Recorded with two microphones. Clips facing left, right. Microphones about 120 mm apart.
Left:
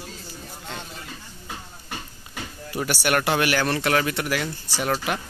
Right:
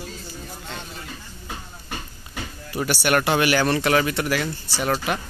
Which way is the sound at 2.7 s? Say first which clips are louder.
Right 2 dB; 10° left (ahead or behind).